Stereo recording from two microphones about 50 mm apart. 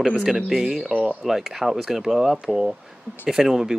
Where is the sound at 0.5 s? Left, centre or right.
Centre.